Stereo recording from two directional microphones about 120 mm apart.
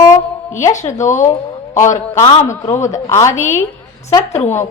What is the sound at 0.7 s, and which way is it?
Speech, 90° left.